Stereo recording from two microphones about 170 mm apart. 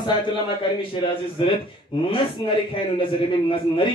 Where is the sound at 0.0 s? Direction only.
30° left (ahead or behind).